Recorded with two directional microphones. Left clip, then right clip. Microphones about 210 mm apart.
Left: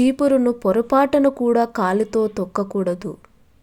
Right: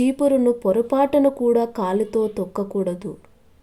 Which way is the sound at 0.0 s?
20° left (ahead or behind).